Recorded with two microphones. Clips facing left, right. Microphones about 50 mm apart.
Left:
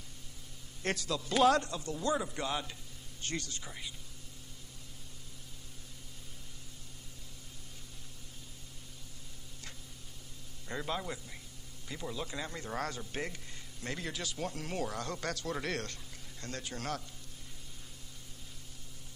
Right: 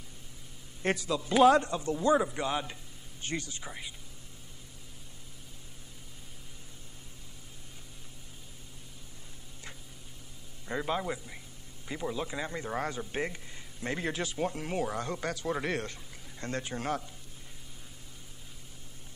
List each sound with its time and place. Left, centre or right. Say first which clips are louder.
0.8 s a man's voice: right 4 dB; centre
10.7 s a man's voice: right 5 dB; centre